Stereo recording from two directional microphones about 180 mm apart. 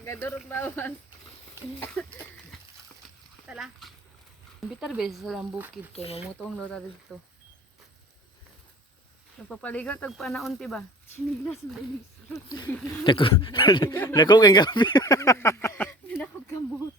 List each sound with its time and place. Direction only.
0.0 s speech: 15° left (ahead or behind); by 5.7 s 5° right (ahead or behind)
6.0 s speech: 35° left (ahead or behind)
6.2 s speech: 5° left (ahead or behind)
9.5 s speech: 5° left (ahead or behind)
12.5 s speech: 20° left (ahead or behind)
13.9 s speech: 10° left (ahead or behind)
14.2 s speech: 25° left (ahead or behind)